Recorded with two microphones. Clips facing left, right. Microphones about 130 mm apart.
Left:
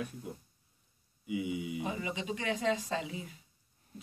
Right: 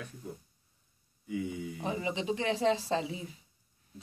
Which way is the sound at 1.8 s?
30° right (ahead or behind).